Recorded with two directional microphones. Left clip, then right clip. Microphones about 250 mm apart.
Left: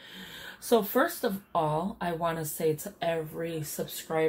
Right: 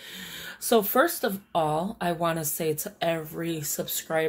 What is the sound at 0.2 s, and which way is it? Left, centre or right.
Speech, right.